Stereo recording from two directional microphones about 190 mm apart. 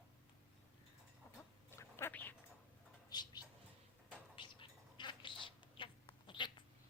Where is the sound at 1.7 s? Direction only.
15° left (ahead or behind).